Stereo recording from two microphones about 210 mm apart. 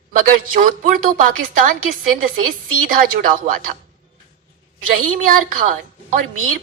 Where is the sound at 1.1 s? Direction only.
40° right (ahead or behind).